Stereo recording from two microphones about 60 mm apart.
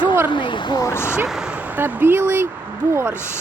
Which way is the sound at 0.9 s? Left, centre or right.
Left.